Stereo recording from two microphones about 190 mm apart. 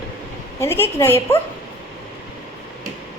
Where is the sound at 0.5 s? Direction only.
15° left (ahead or behind).